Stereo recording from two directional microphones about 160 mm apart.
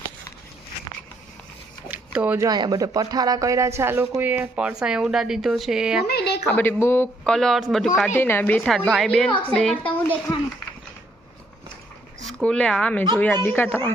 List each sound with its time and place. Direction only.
1.9 s a sound: 10° right (ahead or behind)
2.5 s a woman's voice: 25° right (ahead or behind); by 6.1 s 5° right (ahead or behind)
6.1 s speech: 85° left
6.5 s a man's voice: 15° left (ahead or behind)
8.6 s a woman's voice: centre (ahead or behind)
12.2 s a man's voice: 5° left (ahead or behind)